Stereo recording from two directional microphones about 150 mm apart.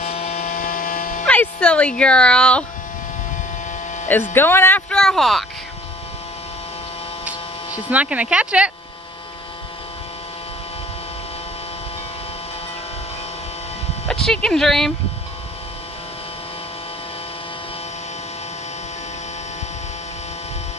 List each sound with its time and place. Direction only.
0.0 s a sound: 45° left (ahead or behind)
1.2 s speech: 10° left (ahead or behind)
4.1 s speech: 15° left (ahead or behind)
7.9 s speech: 10° right (ahead or behind)
14.0 s speech: 5° left (ahead or behind)